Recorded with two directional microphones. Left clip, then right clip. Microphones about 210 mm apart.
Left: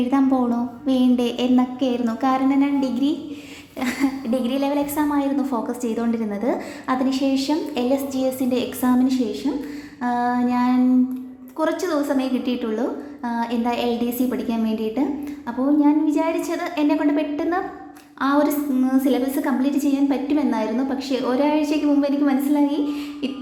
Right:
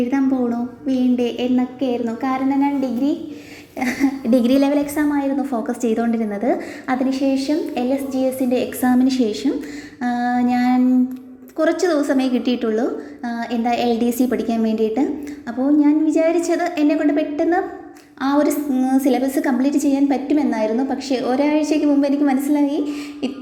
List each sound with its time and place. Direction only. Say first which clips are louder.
0.1 s a woman's voice: even; 5° left (ahead or behind)
3.8 s a woman's voice: right 3 dB; 5° right (ahead or behind)
4.3 s a woman's voice: right 9 dB; 25° right (ahead or behind)
5.1 s a woman's voice: right 1 dB; centre (ahead or behind)
5.6 s a woman's voice: right 4 dB; 10° right (ahead or behind)